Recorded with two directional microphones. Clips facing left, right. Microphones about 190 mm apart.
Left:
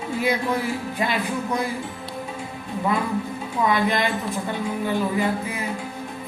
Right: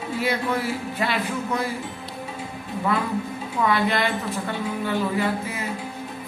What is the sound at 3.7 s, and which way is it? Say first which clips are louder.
Music: left 1 dB; 15° left (ahead or behind).